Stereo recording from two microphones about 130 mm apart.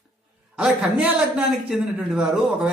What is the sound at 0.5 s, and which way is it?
A man's voice, 5° right (ahead or behind).